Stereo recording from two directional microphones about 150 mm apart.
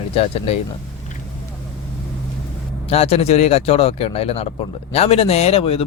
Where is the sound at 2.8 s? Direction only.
40° left (ahead or behind).